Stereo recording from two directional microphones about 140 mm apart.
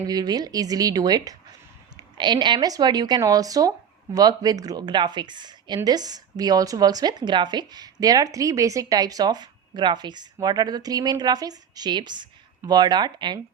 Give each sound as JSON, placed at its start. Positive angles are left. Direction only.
{"t": 0.1, "sound": "speech", "side_deg": -30}